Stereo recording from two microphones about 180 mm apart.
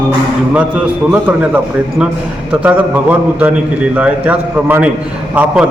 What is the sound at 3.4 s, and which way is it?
A man's voice, 10° right (ahead or behind).